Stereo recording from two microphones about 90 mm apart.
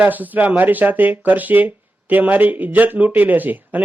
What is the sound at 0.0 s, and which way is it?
Speech, 20° right (ahead or behind).